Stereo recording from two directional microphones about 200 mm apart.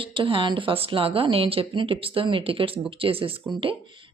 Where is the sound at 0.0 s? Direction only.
25° right (ahead or behind).